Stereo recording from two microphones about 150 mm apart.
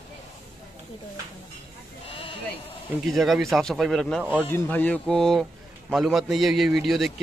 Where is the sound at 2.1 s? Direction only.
40° left (ahead or behind).